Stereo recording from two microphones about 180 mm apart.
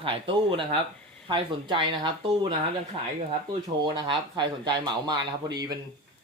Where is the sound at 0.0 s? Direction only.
30° right (ahead or behind).